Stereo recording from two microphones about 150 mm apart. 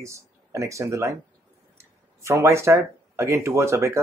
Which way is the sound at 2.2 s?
20° right (ahead or behind).